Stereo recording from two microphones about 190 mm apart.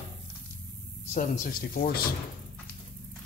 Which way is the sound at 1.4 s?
50° left (ahead or behind).